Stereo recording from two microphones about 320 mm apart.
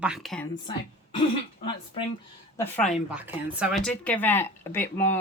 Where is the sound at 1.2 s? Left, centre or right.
Centre.